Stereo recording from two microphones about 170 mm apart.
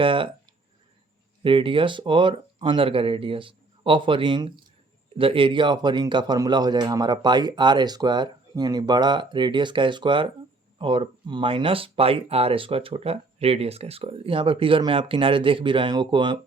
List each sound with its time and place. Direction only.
0.0 s speech: 30° right (ahead or behind)
1.5 s speech: 30° right (ahead or behind)